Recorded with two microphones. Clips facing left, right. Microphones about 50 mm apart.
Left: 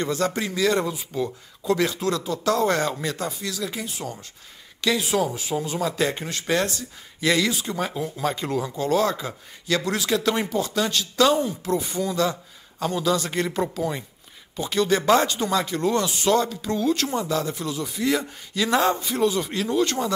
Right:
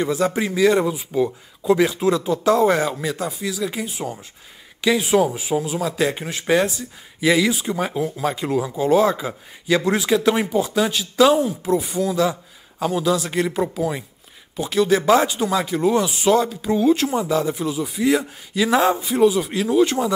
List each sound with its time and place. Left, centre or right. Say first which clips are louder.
0.0 s speech: right 4 dB; centre
5.6 s speech: right 1 dB; centre